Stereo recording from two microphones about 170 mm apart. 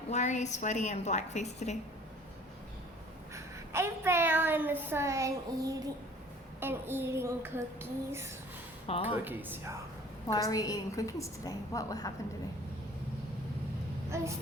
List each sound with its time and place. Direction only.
0.1 s a woman's voice: 45° left (ahead or behind)
3.3 s a woman's voice: 15° right (ahead or behind)
10.3 s a woman's voice: 20° left (ahead or behind)